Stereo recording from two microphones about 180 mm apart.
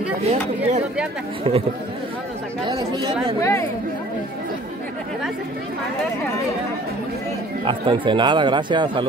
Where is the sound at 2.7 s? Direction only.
25° right (ahead or behind).